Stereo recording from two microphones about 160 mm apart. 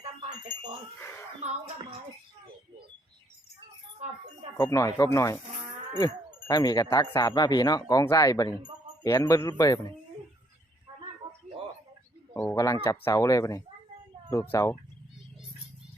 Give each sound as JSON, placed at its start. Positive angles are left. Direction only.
{"t": 1.4, "sound": "music", "side_deg": -45}
{"t": 4.5, "sound": "speech", "side_deg": 20}
{"t": 6.5, "sound": "speech", "side_deg": 25}
{"t": 12.3, "sound": "speech", "side_deg": 10}